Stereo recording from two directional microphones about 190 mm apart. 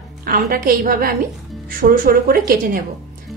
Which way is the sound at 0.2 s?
50° right (ahead or behind).